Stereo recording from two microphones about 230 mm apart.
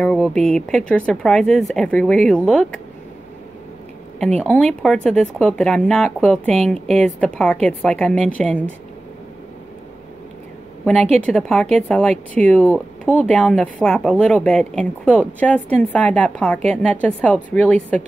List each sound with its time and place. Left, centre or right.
0.0 s speech: centre
4.2 s speech: centre
11.1 s speech: centre